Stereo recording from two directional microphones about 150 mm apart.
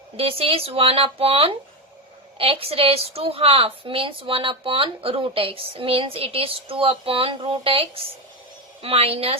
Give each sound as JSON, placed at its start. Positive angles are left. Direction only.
{"t": 0.2, "sound": "a woman's voice", "side_deg": -40}